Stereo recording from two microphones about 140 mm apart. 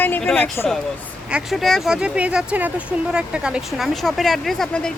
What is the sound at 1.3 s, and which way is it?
Speech, 5° right (ahead or behind).